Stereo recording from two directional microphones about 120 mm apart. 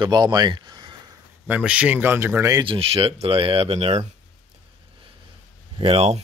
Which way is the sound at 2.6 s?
50° right (ahead or behind).